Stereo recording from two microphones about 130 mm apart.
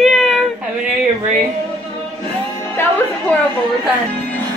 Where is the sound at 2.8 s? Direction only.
20° left (ahead or behind).